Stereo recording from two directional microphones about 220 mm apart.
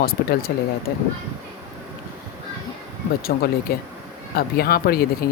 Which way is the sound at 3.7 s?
45° left (ahead or behind).